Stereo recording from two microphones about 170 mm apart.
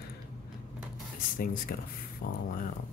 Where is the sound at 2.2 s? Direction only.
65° left (ahead or behind).